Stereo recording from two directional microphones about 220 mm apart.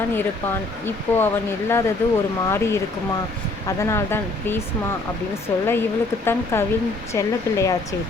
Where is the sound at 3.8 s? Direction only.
10° left (ahead or behind).